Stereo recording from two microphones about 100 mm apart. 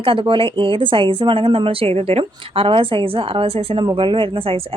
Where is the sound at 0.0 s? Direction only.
60° right (ahead or behind).